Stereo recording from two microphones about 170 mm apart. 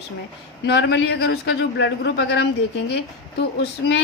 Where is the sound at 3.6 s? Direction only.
80° left.